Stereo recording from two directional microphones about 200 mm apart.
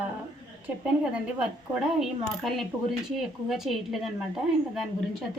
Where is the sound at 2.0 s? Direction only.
Centre (ahead or behind).